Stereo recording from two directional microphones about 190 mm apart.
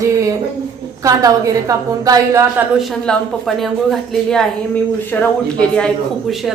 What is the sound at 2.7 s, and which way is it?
A woman's voice, centre (ahead or behind).